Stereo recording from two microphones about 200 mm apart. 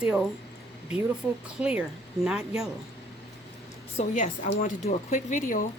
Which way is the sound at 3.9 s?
40° left (ahead or behind).